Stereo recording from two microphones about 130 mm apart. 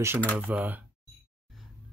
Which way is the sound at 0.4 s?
10° right (ahead or behind).